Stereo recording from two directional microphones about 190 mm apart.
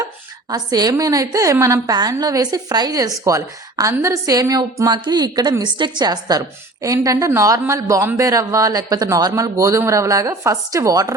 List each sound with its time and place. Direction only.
0.5 s a woman's voice: 20° right (ahead or behind)